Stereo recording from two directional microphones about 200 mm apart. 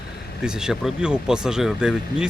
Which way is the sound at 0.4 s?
5° right (ahead or behind).